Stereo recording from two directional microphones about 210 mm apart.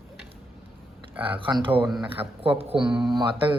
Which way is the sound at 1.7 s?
5° right (ahead or behind).